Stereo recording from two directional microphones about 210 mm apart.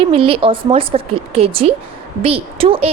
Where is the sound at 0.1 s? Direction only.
25° right (ahead or behind).